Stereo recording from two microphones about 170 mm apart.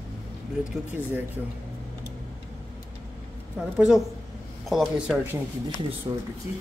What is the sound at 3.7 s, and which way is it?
Speech, centre (ahead or behind).